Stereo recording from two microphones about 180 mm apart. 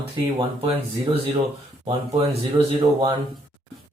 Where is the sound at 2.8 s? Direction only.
25° right (ahead or behind).